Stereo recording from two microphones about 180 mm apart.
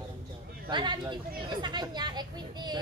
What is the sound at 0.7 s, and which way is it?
Speech, 25° right (ahead or behind).